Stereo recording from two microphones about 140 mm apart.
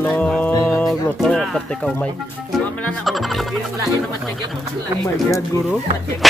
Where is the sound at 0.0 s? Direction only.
10° left (ahead or behind).